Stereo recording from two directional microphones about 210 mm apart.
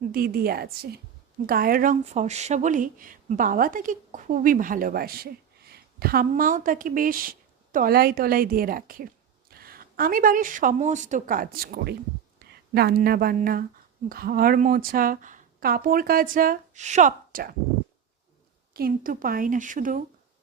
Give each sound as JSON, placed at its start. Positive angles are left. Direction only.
{"t": 0.1, "sound": "a woman's voice", "side_deg": -45}
{"t": 18.7, "sound": "speech", "side_deg": -45}